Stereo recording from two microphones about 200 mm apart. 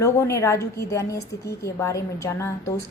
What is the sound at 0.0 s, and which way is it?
A woman's voice, 15° left (ahead or behind).